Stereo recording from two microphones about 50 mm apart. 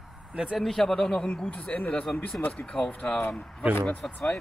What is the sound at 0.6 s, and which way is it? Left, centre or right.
Speech, centre.